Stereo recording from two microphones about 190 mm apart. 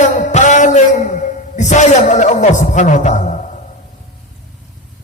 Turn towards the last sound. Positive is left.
turn(degrees=40)  # may be behind; listen again after turning